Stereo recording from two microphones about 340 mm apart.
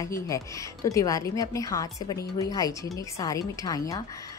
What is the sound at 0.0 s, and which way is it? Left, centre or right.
Speech, centre.